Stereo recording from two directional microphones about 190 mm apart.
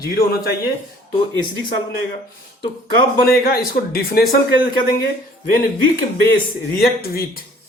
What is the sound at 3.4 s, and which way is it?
Speech, 50° left (ahead or behind).